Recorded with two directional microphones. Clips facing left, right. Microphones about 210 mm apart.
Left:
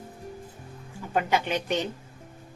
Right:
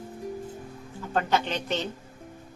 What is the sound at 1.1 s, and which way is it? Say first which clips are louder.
Speech: left 1 dB; 10° left (ahead or behind).